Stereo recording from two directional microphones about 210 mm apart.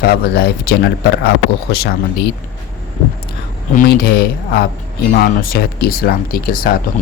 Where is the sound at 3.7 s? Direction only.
50° left (ahead or behind).